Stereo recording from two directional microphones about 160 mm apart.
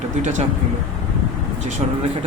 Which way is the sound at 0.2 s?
45° right (ahead or behind).